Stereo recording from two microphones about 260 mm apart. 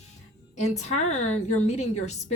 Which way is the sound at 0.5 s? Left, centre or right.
Left.